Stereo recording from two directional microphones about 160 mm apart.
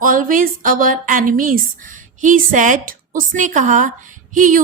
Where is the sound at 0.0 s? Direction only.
60° right (ahead or behind).